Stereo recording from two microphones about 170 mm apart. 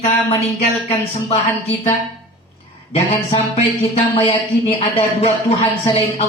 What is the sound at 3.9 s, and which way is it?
Speech, 35° left (ahead or behind).